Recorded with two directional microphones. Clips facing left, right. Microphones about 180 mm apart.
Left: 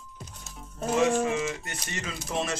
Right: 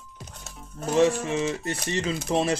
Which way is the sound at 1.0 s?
30° right (ahead or behind).